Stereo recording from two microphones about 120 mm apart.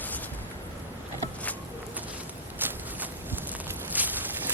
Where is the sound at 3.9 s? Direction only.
15° right (ahead or behind).